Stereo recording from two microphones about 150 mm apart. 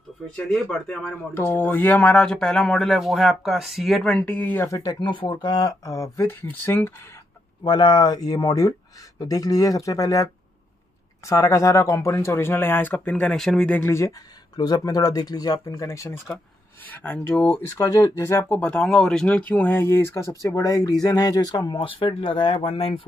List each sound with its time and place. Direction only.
0.5 s speech: 5° left (ahead or behind)
7.6 s speech: 30° left (ahead or behind); by 17.7 s 10° left (ahead or behind)
17.7 s speech: 25° left (ahead or behind); by 23.0 s 40° left (ahead or behind)